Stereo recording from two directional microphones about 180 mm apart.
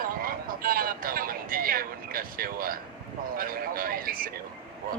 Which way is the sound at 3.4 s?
55° right (ahead or behind).